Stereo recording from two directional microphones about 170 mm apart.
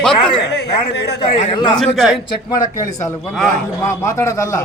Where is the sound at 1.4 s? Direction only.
30° left (ahead or behind).